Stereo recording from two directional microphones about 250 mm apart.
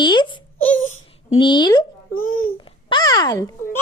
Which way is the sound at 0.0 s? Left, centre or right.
Centre.